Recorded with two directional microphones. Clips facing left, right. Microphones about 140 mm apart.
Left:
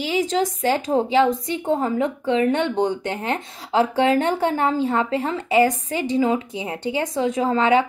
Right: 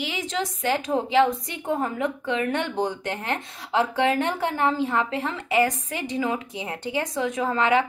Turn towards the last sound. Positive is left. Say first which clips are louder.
# left 4 dB
turn(degrees=30)  # may be behind; listen again after turning